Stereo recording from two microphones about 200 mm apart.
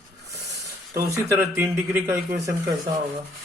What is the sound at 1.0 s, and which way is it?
A man's voice, 15° right (ahead or behind).